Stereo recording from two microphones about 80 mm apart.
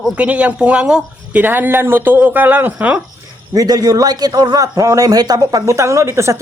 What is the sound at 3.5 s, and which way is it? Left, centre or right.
A man's voice, right.